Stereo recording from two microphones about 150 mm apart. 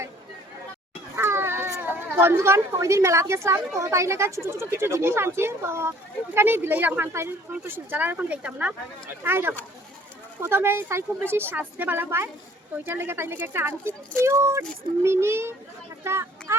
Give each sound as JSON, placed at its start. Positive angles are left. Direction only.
{"t": 1.1, "sound": "speech", "side_deg": -15}